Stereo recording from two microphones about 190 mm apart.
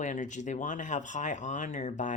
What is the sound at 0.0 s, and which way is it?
Speech, 40° left (ahead or behind).